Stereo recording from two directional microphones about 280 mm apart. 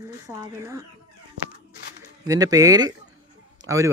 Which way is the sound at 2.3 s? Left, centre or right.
Centre.